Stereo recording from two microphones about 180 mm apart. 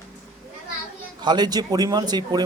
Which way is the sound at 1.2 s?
25° right (ahead or behind).